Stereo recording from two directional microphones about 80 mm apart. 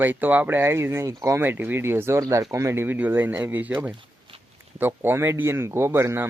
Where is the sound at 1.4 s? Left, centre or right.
Right.